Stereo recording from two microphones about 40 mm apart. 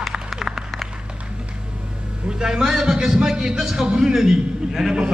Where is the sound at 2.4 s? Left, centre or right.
Centre.